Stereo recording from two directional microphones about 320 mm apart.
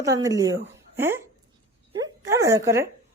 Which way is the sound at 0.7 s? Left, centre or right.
Centre.